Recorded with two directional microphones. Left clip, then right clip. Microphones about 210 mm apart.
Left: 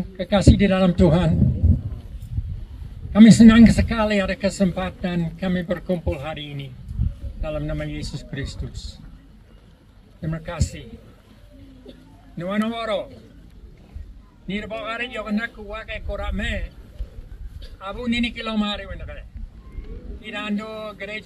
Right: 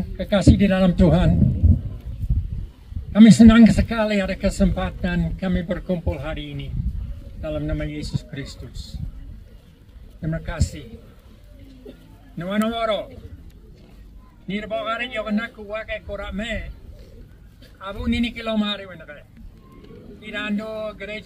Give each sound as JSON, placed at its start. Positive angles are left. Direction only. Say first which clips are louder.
{"t": 0.2, "sound": "speech", "louder": "even", "side_deg": 15}
{"t": 3.1, "sound": "speech", "louder": "even", "side_deg": 15}
{"t": 10.2, "sound": "speech", "louder": "right 1 dB", "side_deg": 15}
{"t": 12.4, "sound": "speech", "louder": "right 2 dB", "side_deg": 15}
{"t": 14.5, "sound": "speech", "louder": "right 3 dB", "side_deg": 15}
{"t": 17.7, "sound": "speech", "louder": "left 1 dB", "side_deg": 15}
{"t": 20.2, "sound": "speech", "louder": "right 1 dB", "side_deg": 15}